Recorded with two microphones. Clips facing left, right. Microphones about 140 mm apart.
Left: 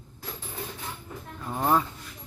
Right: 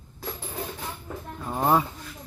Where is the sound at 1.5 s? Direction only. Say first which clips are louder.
Right 2 dB; 15° right (ahead or behind).